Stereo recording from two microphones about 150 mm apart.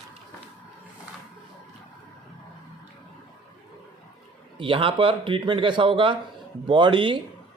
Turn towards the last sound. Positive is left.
turn(degrees=-35)  # may be behind; listen again after turning